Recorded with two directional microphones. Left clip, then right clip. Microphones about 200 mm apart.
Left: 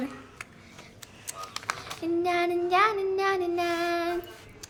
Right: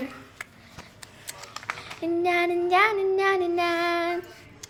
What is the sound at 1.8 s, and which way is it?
Child singing, 15° right (ahead or behind).